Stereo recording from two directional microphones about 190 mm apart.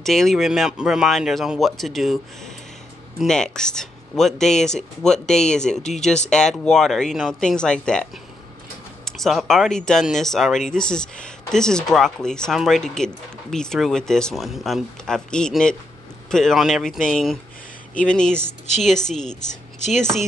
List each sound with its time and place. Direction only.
0.0 s speech: centre (ahead or behind)
19.4 s speech: 40° left (ahead or behind)